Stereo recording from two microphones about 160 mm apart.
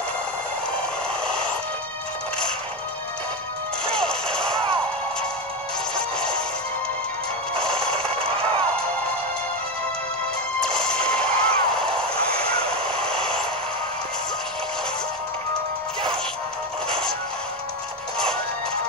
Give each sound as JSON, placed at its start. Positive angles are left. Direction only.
{"t": 1.2, "sound": "music", "side_deg": 5}
{"t": 3.8, "sound": "music", "side_deg": 5}
{"t": 5.9, "sound": "music", "side_deg": 5}
{"t": 7.5, "sound": "music", "side_deg": 5}
{"t": 8.1, "sound": "a sound", "side_deg": -35}
{"t": 10.6, "sound": "a sound", "side_deg": 5}
{"t": 13.0, "sound": "vehicle", "side_deg": 5}